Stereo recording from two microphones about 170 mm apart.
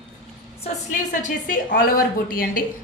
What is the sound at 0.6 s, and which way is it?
A woman's voice, 50° left (ahead or behind).